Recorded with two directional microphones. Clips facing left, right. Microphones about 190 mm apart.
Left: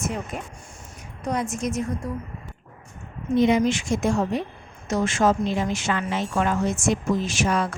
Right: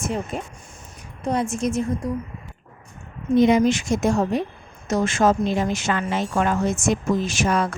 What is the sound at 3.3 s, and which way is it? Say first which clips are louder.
A woman's voice: right 3 dB; 40° right (ahead or behind).